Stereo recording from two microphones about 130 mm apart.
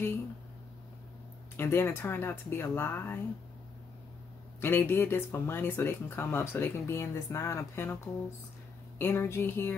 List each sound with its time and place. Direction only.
1.6 s speech: 15° left (ahead or behind)
4.6 s speech: 15° left (ahead or behind)